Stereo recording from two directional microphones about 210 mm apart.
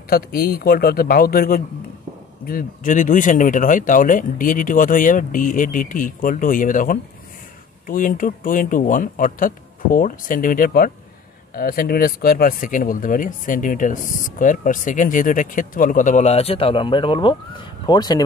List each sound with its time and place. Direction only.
0.1 s speech: 45° left (ahead or behind); by 18.2 s 20° left (ahead or behind)